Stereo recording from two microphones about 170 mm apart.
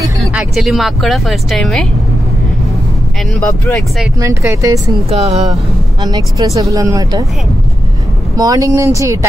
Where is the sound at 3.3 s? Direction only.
10° left (ahead or behind).